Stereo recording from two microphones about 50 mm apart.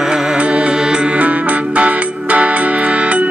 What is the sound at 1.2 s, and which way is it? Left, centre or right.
Music, right.